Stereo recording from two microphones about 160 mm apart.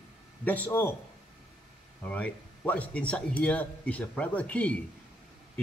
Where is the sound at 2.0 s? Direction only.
10° left (ahead or behind).